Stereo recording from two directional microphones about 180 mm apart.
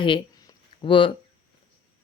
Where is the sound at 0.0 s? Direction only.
30° left (ahead or behind).